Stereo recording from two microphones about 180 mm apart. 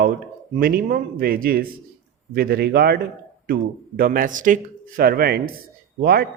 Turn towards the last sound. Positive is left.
turn(degrees=-60)  # may be behind; listen again after turning